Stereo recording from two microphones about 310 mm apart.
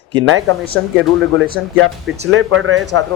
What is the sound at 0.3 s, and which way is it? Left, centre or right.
A man's voice, right.